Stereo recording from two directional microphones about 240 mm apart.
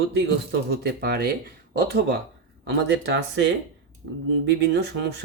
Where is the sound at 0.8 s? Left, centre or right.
Right.